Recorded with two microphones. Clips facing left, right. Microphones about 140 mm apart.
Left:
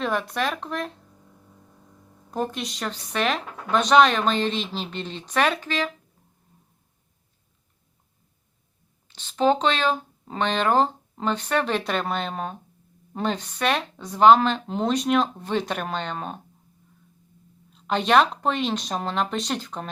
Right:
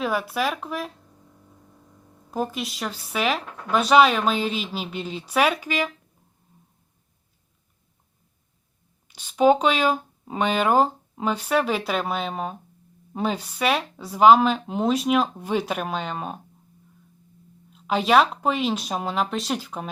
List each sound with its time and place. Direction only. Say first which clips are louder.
0.0 s speech: right 1 dB; 5° right (ahead or behind)
2.3 s speech: even; 5° right (ahead or behind)
9.0 s speech: right 3 dB; 10° right (ahead or behind)
17.7 s speech: right 1 dB; 5° right (ahead or behind)